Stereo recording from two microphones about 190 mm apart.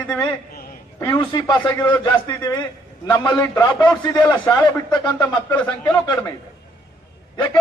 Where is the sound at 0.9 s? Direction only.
15° left (ahead or behind).